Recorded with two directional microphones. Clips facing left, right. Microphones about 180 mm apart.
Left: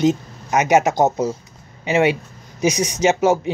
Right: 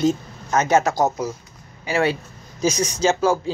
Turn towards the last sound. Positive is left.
turn(degrees=20)  # may be behind; listen again after turning